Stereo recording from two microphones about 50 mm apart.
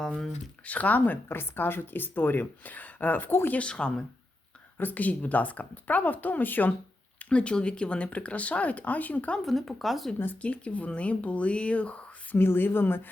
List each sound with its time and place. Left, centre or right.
0.6 s speech: left
3.5 s speech: left
4.8 s speech: left
7.2 s speech: left
9.4 s speech: centre
10.4 s speech: left
12.4 s a woman's voice: left